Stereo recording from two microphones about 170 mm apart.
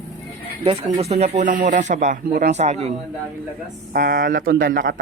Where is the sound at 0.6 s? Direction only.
35° right (ahead or behind).